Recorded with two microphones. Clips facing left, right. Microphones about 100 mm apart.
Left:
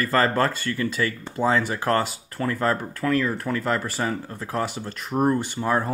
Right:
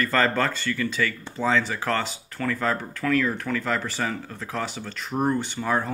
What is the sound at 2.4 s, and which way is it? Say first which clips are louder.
Speech: left 1 dB; 25° left (ahead or behind).